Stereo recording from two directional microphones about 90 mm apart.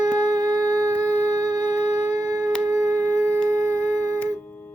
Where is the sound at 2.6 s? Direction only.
35° right (ahead or behind).